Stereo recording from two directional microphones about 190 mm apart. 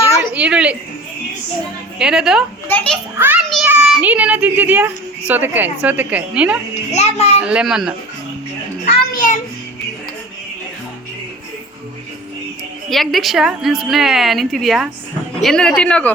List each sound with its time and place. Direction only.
0.2 s a sound: 5° right (ahead or behind)
2.0 s a woman's voice: 5° right (ahead or behind)
2.6 s a child's voice: 5° left (ahead or behind)
3.2 s a child's voice: 10° right (ahead or behind)
3.4 s a sound: centre (ahead or behind)
3.7 s a woman's voice: 5° right (ahead or behind)
6.9 s a child's voice: 35° left (ahead or behind)
7.4 s a woman's voice: 5° right (ahead or behind)
8.9 s a child's voice: 45° left (ahead or behind)
12.9 s a woman's voice: centre (ahead or behind)